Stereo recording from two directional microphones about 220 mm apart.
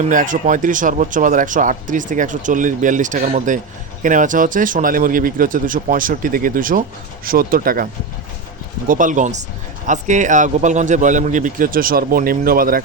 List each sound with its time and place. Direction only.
0.1 s speech: 35° right (ahead or behind)
8.9 s speech: 35° right (ahead or behind)